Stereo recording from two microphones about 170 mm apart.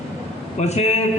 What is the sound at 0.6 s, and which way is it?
Speech, 40° left (ahead or behind).